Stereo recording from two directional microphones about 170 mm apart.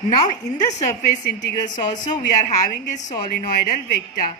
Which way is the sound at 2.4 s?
45° left (ahead or behind).